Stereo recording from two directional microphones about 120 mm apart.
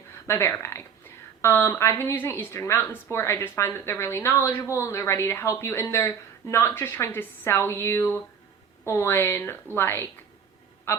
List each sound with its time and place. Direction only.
0.3 s a woman's voice: 20° left (ahead or behind)